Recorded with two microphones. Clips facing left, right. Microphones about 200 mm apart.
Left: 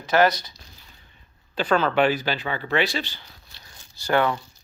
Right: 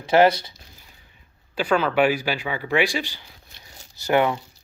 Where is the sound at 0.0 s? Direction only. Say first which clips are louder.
Right 3 dB; 25° right (ahead or behind).